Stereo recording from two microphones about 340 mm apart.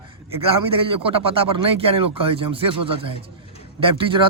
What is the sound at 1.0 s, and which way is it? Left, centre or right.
Speech, centre.